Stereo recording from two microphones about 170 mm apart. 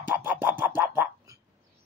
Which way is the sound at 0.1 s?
10° right (ahead or behind).